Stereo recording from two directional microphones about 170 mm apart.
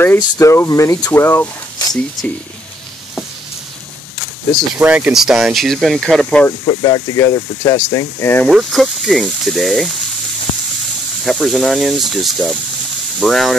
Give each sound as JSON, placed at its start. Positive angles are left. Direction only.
{"t": 0.0, "sound": "speech", "side_deg": 15}
{"t": 4.7, "sound": "speech", "side_deg": -5}
{"t": 6.6, "sound": "speech", "side_deg": 25}
{"t": 8.5, "sound": "speech", "side_deg": 0}
{"t": 11.2, "sound": "speech", "side_deg": 0}